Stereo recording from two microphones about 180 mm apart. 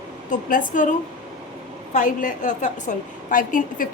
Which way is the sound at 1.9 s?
45° left (ahead or behind).